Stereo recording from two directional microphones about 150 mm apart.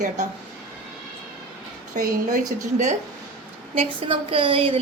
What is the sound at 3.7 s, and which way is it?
A woman's voice, 40° right (ahead or behind).